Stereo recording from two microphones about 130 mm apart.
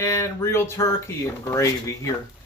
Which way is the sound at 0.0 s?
20° left (ahead or behind).